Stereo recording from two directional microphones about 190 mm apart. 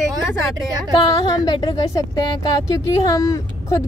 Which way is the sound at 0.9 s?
20° left (ahead or behind).